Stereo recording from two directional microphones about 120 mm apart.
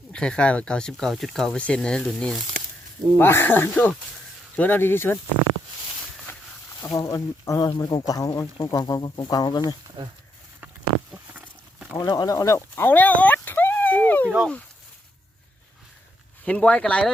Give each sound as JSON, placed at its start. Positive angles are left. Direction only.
{"t": 0.1, "sound": "speech", "side_deg": 10}
{"t": 3.2, "sound": "speech", "side_deg": 20}
{"t": 6.8, "sound": "speech", "side_deg": 25}
{"t": 11.1, "sound": "a sound", "side_deg": -10}
{"t": 11.9, "sound": "speech", "side_deg": 35}
{"t": 14.3, "sound": "speech", "side_deg": -5}
{"t": 16.5, "sound": "speech", "side_deg": 10}